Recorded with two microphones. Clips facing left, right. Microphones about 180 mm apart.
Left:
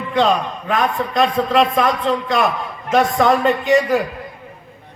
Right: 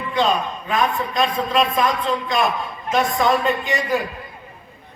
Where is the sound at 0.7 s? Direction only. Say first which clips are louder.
Left 2 dB; 60° left (ahead or behind).